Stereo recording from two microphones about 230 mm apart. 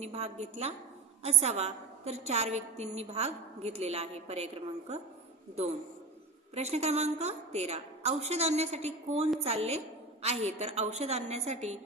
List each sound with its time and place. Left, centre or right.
0.0 s a woman's voice: right
6.5 s a woman's voice: right